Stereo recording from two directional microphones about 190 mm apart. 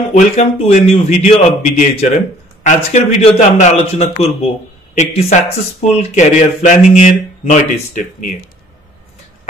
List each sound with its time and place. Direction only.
0.1 s a man's voice: 35° left (ahead or behind)